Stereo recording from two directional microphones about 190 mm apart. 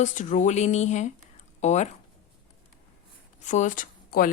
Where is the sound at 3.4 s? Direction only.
40° left (ahead or behind).